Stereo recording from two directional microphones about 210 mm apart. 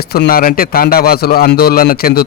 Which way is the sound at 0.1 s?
45° left (ahead or behind).